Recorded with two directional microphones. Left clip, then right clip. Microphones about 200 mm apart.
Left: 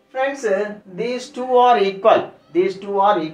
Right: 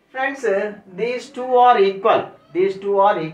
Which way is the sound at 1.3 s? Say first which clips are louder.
Right 1 dB; 20° left (ahead or behind).